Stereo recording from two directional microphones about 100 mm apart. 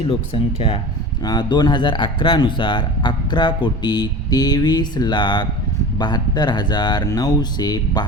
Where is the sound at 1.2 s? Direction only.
45° left (ahead or behind).